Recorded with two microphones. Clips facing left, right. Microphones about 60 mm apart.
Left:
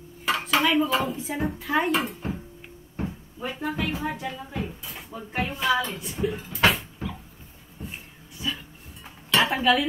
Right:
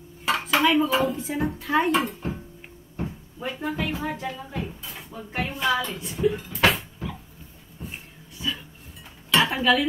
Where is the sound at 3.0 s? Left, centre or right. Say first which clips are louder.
Even; centre.